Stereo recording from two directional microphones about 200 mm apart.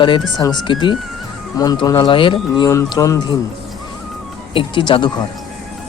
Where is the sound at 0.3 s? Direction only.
20° left (ahead or behind).